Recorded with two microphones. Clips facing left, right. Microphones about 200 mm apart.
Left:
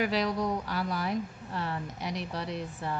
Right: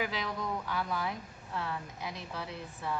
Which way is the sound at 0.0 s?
70° left (ahead or behind).